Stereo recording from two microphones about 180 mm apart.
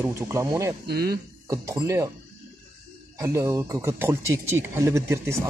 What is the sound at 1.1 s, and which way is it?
Speech, 20° right (ahead or behind).